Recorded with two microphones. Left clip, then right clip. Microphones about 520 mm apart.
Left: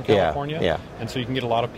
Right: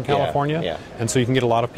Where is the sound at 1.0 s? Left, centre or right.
Right.